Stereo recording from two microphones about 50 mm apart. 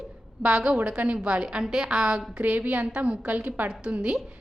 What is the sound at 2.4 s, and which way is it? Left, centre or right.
A woman's voice, right.